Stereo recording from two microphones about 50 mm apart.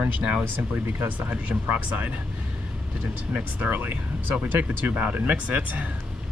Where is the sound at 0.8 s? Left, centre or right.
Right.